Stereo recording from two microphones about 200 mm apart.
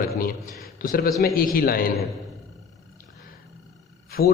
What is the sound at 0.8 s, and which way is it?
A man's voice, 50° left (ahead or behind).